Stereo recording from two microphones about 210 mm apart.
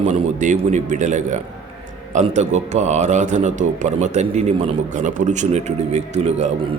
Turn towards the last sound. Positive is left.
turn(degrees=-30)  # may be behind; listen again after turning